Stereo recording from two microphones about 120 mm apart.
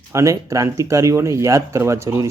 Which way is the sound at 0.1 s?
25° right (ahead or behind).